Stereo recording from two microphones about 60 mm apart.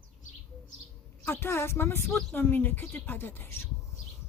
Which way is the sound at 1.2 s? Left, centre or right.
Left.